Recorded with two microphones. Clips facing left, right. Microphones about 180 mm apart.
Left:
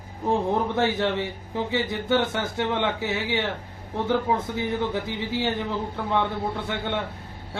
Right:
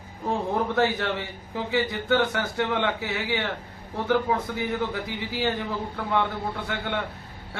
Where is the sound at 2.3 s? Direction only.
20° left (ahead or behind).